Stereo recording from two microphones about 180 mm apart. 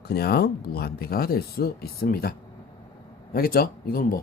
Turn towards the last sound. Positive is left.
turn(degrees=50)  # may be behind; listen again after turning